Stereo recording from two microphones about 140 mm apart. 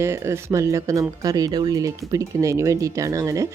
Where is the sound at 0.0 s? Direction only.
20° right (ahead or behind).